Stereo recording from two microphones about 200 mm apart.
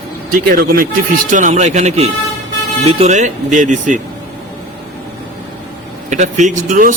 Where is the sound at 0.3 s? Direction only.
45° right (ahead or behind).